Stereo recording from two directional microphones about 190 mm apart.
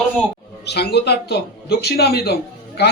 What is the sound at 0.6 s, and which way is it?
A man's voice, 60° left (ahead or behind).